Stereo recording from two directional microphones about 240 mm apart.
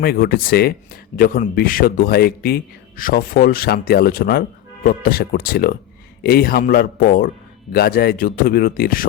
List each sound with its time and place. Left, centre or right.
0.0 s speech: left